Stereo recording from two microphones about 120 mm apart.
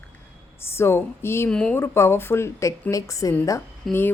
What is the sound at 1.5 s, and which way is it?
Speech, 10° left (ahead or behind).